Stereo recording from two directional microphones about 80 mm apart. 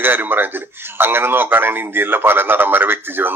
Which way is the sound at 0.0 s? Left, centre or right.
Right.